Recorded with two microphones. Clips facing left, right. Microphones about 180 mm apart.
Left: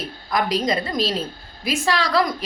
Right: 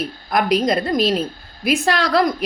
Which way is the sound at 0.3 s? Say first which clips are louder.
Right 4 dB; 60° right (ahead or behind).